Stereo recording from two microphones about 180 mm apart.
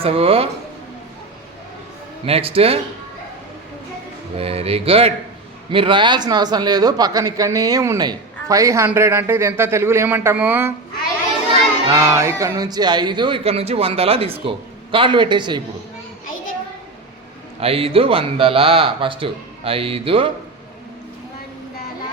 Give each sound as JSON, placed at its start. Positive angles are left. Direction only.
{"t": 0.0, "sound": "speech", "side_deg": -35}
{"t": 2.2, "sound": "speech", "side_deg": -30}
{"t": 4.4, "sound": "speech", "side_deg": -35}
{"t": 11.9, "sound": "speech", "side_deg": -15}
{"t": 17.6, "sound": "speech", "side_deg": -35}